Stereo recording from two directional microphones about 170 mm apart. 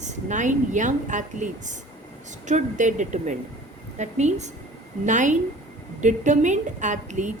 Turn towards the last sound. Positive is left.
turn(degrees=-45)  # may be behind; listen again after turning